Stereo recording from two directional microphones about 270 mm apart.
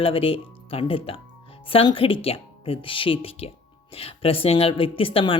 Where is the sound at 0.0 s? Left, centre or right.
Left.